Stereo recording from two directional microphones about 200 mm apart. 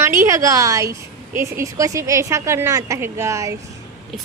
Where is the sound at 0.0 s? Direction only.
15° right (ahead or behind).